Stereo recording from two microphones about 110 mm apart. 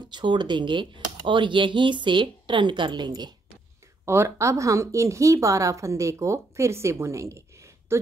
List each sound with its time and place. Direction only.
0.0 s speech: 45° right (ahead or behind)
4.0 s a woman's voice: 25° right (ahead or behind)